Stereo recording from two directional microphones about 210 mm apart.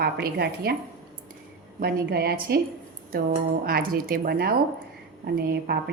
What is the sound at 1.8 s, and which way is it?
A woman's voice, 50° right (ahead or behind).